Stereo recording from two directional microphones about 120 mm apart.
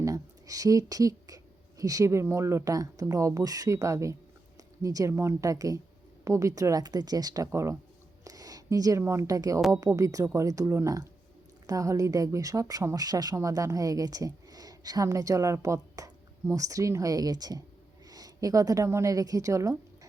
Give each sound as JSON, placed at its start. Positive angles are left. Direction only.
{"t": 0.0, "sound": "a sound", "side_deg": -30}
{"t": 1.8, "sound": "speech", "side_deg": -30}
{"t": 9.6, "sound": "a woman's voice", "side_deg": -5}
{"t": 9.8, "sound": "a woman's voice", "side_deg": -30}